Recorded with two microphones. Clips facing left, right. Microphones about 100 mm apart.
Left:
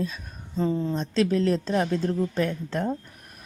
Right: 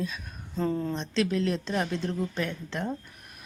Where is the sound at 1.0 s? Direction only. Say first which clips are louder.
Left 4 dB; 35° left (ahead or behind).